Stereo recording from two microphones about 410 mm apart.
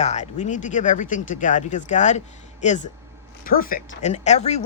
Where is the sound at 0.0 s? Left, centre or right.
Centre.